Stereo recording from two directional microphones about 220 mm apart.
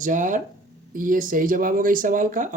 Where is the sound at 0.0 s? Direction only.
35° right (ahead or behind).